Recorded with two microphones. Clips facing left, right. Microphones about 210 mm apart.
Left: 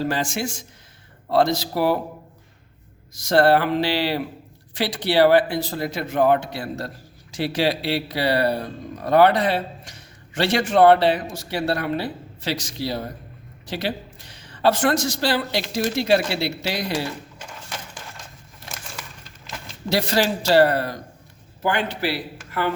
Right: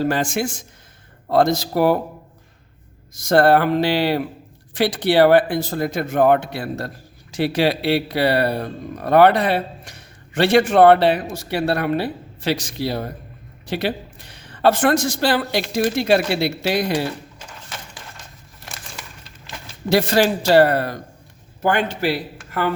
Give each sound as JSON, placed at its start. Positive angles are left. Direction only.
{"t": 0.0, "sound": "speech", "side_deg": -50}
{"t": 3.2, "sound": "a man's voice", "side_deg": -50}
{"t": 19.9, "sound": "a man's voice", "side_deg": -55}